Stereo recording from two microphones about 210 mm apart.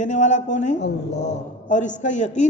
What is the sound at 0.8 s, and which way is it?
Speech, 55° left (ahead or behind).